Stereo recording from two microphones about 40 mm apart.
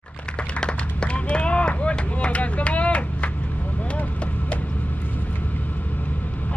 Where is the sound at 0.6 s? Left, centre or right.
Left.